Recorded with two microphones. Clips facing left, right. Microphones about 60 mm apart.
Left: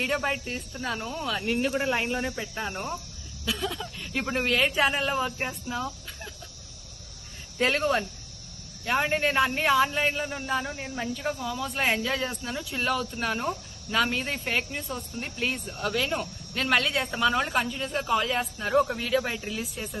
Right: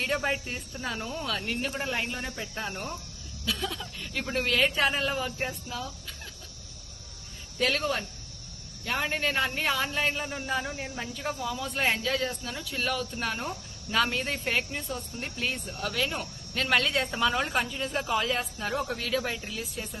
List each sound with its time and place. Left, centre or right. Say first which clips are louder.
0.0 s a man's voice: left 1 dB; centre
7.6 s a man's voice: left 3 dB; left; by 20.0 s centre